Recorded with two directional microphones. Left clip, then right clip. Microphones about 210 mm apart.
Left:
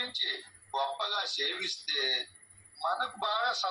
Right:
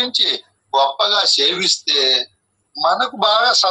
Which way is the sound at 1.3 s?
80° right.